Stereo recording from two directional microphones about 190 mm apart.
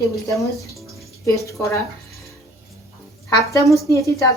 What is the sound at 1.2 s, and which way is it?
Speech, 15° left (ahead or behind).